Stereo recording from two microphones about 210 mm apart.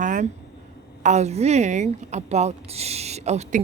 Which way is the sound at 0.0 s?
35° right (ahead or behind).